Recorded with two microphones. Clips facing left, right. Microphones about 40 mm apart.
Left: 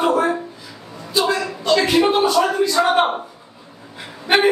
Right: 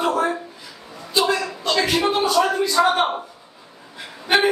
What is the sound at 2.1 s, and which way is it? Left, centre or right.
Speech, centre.